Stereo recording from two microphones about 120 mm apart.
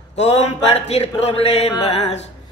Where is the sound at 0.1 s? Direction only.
60° left (ahead or behind).